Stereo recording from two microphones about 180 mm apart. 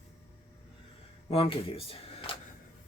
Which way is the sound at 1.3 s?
30° left (ahead or behind).